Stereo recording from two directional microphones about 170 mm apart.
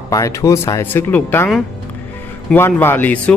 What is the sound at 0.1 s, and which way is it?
Speech, 20° left (ahead or behind).